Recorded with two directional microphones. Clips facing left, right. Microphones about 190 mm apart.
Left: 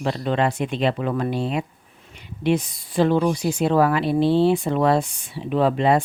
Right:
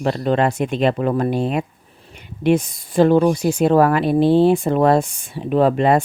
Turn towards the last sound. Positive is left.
turn(degrees=-50)  # may be behind; listen again after turning